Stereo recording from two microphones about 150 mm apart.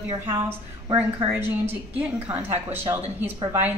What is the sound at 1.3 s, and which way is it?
A woman's voice, 15° right (ahead or behind).